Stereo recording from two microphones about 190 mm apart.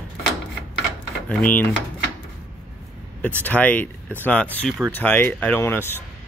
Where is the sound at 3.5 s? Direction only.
10° left (ahead or behind).